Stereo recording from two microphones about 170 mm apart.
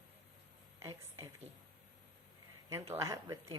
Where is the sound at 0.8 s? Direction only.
20° right (ahead or behind).